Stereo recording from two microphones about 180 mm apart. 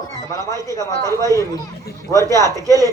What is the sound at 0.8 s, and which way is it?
A man's voice, 20° right (ahead or behind).